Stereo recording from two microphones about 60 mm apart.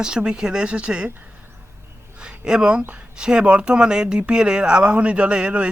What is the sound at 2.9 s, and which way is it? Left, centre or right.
Speech, centre.